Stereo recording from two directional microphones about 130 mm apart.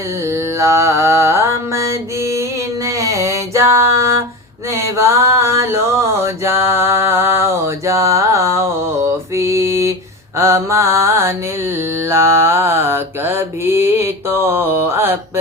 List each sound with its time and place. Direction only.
0.3 s mantra: 20° right (ahead or behind)
4.7 s a sound: 20° right (ahead or behind)
10.3 s mantra: 20° right (ahead or behind)